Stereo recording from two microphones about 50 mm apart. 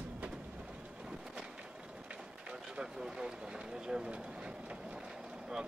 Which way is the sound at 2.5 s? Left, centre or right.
Centre.